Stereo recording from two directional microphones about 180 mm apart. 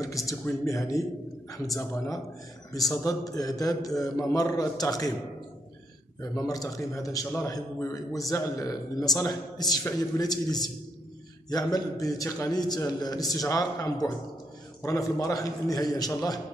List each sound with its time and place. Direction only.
0.0 s a man's voice: 20° left (ahead or behind)
6.2 s a man's voice: 20° left (ahead or behind)